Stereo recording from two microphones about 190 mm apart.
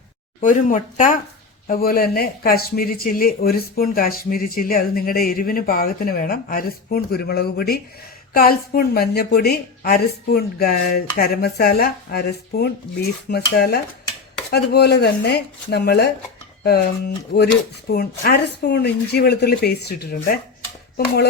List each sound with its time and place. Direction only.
0.4 s speech: 45° left (ahead or behind); by 16.1 s 60° left (ahead or behind)
17.3 s speech: 60° left (ahead or behind)